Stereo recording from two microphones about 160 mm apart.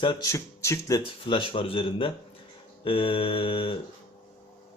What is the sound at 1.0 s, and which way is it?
Speech, 35° left (ahead or behind).